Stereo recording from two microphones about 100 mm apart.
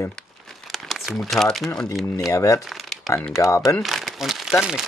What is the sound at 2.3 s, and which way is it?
Speech, 30° left (ahead or behind).